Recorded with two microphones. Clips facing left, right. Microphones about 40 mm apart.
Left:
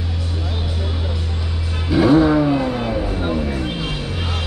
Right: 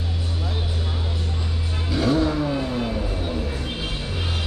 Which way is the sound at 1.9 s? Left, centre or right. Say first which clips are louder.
Left 8 dB; centre.